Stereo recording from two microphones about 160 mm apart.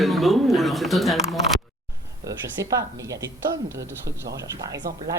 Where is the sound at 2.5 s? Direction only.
20° right (ahead or behind).